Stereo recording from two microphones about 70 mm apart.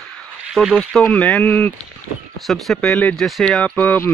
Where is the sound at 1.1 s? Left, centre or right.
Left.